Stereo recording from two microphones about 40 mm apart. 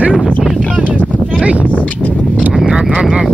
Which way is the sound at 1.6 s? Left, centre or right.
Left.